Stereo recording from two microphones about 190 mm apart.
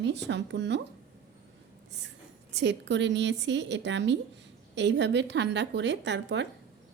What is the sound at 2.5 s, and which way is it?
A woman's voice, 70° right (ahead or behind).